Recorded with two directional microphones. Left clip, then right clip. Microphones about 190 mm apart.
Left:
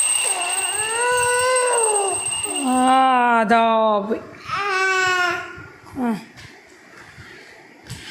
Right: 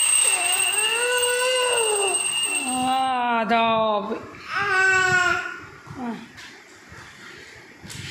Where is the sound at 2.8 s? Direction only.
40° left (ahead or behind); by 4.0 s 25° left (ahead or behind).